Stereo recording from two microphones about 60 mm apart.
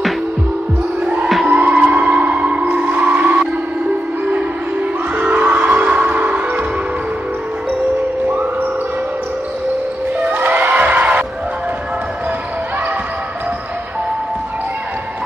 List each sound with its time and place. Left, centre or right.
1.0 s music: right
5.1 s music: right
10.2 s music: right